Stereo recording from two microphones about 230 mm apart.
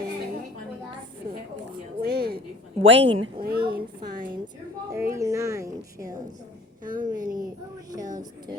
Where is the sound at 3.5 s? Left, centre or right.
Right.